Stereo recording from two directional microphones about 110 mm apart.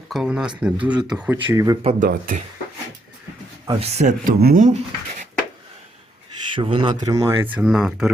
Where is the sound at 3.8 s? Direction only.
90° right.